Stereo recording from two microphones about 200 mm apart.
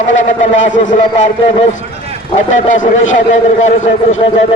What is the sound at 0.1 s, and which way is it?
Speech, 70° left (ahead or behind).